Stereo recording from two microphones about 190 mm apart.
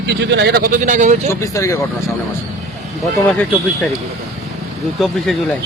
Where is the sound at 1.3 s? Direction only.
15° left (ahead or behind).